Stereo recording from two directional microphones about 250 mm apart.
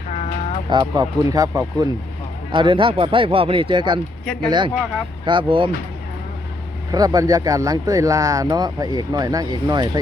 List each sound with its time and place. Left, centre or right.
0.7 s speech: centre
6.9 s speech: centre